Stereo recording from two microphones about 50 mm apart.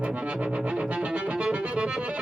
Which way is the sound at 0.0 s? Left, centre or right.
Right.